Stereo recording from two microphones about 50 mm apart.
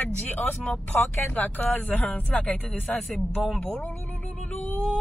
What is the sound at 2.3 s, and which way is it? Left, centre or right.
Speech, left.